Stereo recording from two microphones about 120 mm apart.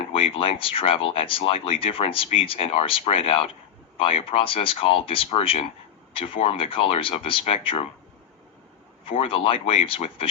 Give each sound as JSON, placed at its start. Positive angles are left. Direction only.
{"t": 0.1, "sound": "speech", "side_deg": 50}
{"t": 9.0, "sound": "speech", "side_deg": 50}